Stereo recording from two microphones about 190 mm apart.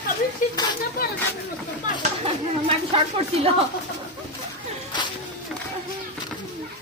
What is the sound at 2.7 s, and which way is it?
Speech, 30° right (ahead or behind).